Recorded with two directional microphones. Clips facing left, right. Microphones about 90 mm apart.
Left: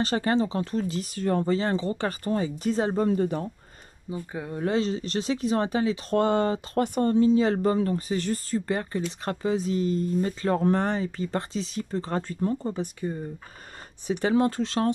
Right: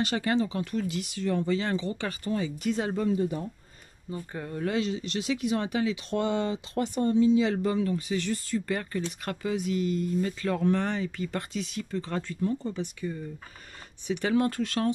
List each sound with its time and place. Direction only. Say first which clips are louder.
0.0 s speech: left 3 dB; 35° left (ahead or behind)
3.1 s speech: left 3 dB; 65° left (ahead or behind)
4.1 s speech: left 3 dB; 10° left (ahead or behind)
4.6 s speech: left 3 dB; 30° left (ahead or behind)
6.1 s speech: left 6 dB; 45° left (ahead or behind); by 14.9 s 25° left (ahead or behind)